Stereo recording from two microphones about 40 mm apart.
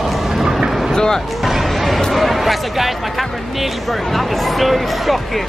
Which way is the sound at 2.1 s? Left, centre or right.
Centre.